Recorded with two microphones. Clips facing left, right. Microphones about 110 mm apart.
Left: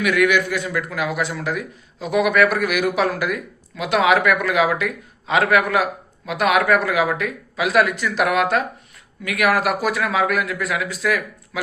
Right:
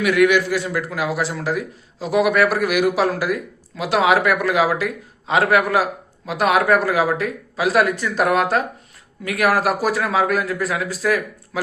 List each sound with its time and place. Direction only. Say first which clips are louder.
0.1 s a man's voice: right 3 dB; 25° right (ahead or behind)